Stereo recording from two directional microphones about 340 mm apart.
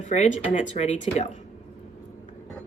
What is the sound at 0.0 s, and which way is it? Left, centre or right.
Speech, left.